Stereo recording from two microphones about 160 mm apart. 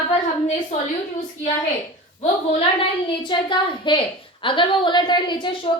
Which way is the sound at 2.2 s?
40° left (ahead or behind).